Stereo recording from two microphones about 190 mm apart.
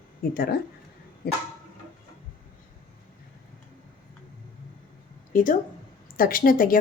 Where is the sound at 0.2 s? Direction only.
50° left (ahead or behind).